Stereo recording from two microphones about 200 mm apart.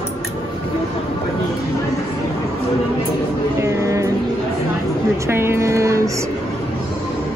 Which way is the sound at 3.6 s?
15° right (ahead or behind).